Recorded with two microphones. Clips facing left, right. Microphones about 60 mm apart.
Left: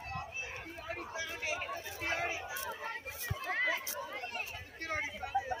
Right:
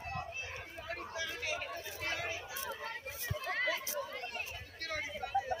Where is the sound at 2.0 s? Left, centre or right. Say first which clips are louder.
Left 4 dB; left.